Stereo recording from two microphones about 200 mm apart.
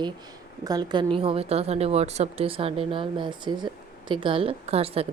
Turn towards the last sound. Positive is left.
turn(degrees=-30)  # may be behind; listen again after turning